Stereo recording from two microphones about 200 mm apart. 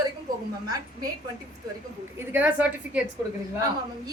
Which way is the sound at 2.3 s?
10° right (ahead or behind).